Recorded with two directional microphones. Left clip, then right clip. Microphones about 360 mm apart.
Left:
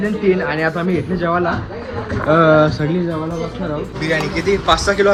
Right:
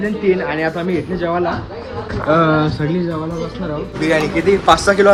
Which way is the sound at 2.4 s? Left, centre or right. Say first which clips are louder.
Left 3 dB; centre.